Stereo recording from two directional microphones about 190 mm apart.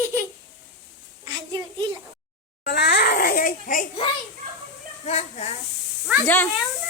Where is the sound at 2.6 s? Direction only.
60° left (ahead or behind).